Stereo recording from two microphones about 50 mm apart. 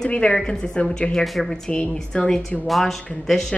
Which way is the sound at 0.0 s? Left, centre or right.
Centre.